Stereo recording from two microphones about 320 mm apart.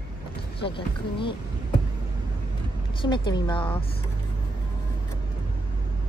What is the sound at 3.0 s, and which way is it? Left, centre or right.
Speech, centre.